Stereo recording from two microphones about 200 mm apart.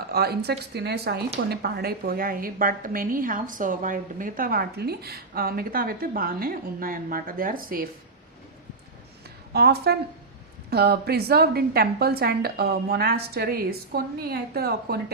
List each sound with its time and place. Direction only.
0.1 s a woman's voice: 50° right (ahead or behind)
9.5 s a woman's voice: 50° right (ahead or behind)